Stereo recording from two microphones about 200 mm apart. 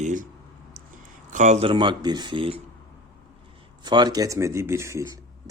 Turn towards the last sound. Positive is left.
turn(degrees=-15)  # may be behind; listen again after turning